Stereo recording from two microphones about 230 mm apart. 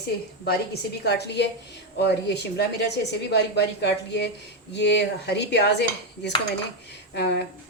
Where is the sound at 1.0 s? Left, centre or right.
Left.